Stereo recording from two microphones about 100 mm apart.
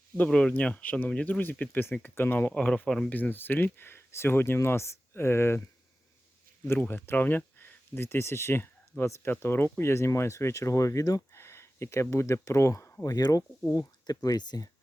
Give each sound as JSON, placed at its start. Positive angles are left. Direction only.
{"t": 0.3, "sound": "speech", "side_deg": 10}
{"t": 2.5, "sound": "speech", "side_deg": 10}
{"t": 6.7, "sound": "speech", "side_deg": 20}